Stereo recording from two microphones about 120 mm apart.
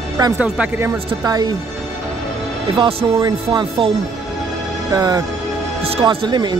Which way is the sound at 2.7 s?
50° right (ahead or behind).